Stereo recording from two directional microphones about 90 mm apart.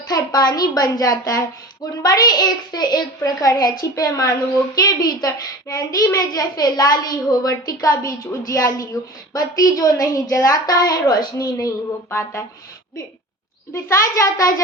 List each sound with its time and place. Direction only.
0.1 s a child's voice: 50° left (ahead or behind)
12.1 s speech: 30° left (ahead or behind)
13.8 s a woman's voice: 35° left (ahead or behind)